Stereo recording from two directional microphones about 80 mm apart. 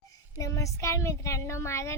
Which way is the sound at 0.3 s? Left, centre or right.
Left.